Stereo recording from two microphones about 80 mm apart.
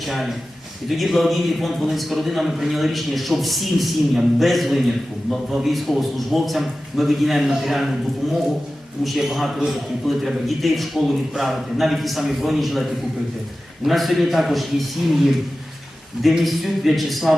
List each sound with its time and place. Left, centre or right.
0.0 s a man's voice: centre
9.0 s a man's voice: centre